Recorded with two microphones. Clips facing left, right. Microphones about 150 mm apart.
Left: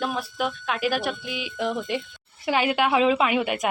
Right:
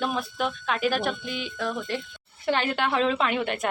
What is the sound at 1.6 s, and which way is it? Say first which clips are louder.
Speech: left 4 dB; 20° left (ahead or behind).